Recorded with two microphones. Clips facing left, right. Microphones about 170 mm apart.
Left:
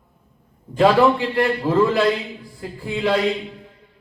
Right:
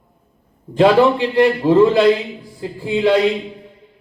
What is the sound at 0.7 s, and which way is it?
A man's voice, 20° right (ahead or behind).